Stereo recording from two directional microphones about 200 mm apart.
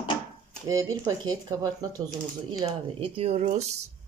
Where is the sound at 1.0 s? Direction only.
20° right (ahead or behind).